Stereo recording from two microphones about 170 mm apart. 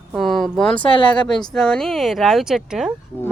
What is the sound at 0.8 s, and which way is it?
Speech, 30° left (ahead or behind).